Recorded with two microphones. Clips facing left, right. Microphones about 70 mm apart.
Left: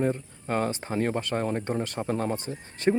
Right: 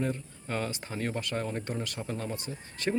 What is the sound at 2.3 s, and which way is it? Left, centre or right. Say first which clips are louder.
Speech: left 5 dB; left.